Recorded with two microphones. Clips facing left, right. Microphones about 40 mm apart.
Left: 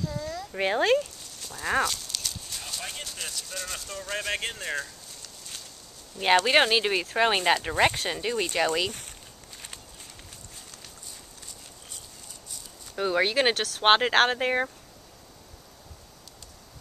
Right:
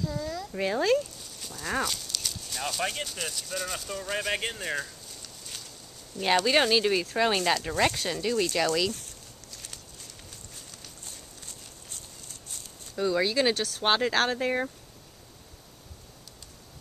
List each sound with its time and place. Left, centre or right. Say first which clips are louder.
0.0 s a sound: right 1 dB; centre
0.6 s speech: left 2 dB; left
1.2 s livestock: left 1 dB; centre
1.6 s speech: left 4 dB; centre
1.9 s clip-clop: even; centre
3.1 s speech: right 2 dB; centre
6.1 s speech: left 3 dB; centre
9.5 s walk: left 2 dB; centre
12.9 s speech: left 1 dB; left